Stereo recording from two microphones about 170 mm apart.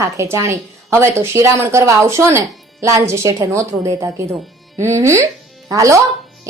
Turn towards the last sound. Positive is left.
turn(degrees=-20)  # may be behind; listen again after turning